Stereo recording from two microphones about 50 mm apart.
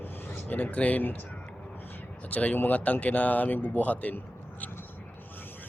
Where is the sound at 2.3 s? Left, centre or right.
Left.